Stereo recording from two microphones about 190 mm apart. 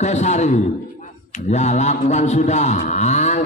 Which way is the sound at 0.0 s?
35° left (ahead or behind).